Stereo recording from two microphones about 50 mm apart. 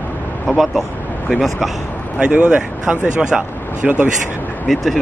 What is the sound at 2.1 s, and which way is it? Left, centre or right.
Speech, right.